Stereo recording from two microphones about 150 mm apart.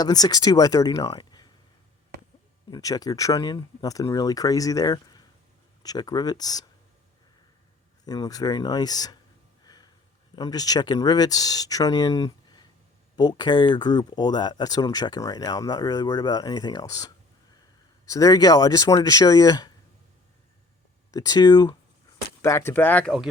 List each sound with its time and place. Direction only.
0.0 s speech: 25° left (ahead or behind)
2.6 s speech: 25° left (ahead or behind)
8.0 s speech: 25° left (ahead or behind)
9.6 s a sound: 25° left (ahead or behind)
10.3 s speech: 25° left (ahead or behind)
21.1 s speech: 25° left (ahead or behind)
22.4 s speech: 15° left (ahead or behind)